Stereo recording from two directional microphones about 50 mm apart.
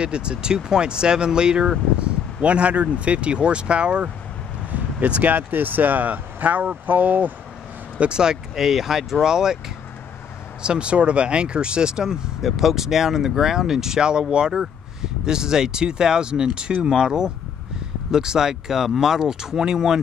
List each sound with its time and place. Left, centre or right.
0.0 s speech: centre
2.4 s speech: right
8.0 s speech: centre
10.6 s speech: centre